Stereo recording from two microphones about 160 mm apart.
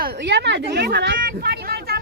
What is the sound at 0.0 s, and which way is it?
Speech, 90° right.